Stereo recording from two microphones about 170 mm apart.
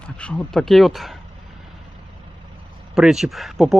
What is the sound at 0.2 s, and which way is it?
Speech, 5° left (ahead or behind).